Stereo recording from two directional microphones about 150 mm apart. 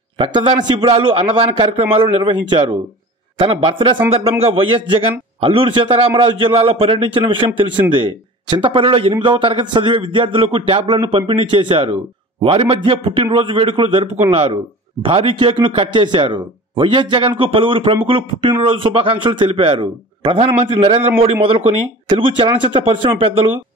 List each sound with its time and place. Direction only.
0.2 s a man's voice: 35° right (ahead or behind)